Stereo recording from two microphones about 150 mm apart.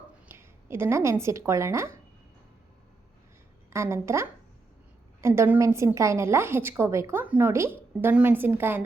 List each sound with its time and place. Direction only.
0.3 s speech: 15° right (ahead or behind)
3.7 s a woman's voice: 20° right (ahead or behind)